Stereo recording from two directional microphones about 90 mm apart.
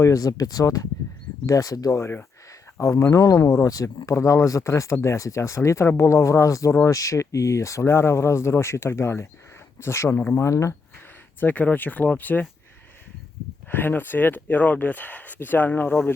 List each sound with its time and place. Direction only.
0.0 s speech: 40° left (ahead or behind)
2.0 s speech: 30° left (ahead or behind)
10.4 s speech: 35° left (ahead or behind)
11.3 s speech: 20° left (ahead or behind)
13.7 s speech: 20° left (ahead or behind)